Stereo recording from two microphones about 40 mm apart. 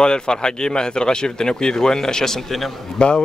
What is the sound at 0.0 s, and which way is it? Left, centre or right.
Speech, left.